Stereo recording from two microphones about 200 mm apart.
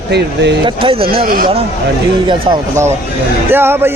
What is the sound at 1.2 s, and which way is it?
Speech, 45° right (ahead or behind).